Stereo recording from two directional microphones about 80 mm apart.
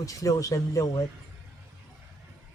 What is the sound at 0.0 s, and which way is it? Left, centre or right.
Speech, left.